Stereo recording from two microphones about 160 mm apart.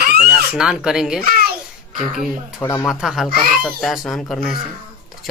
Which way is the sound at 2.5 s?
15° left (ahead or behind).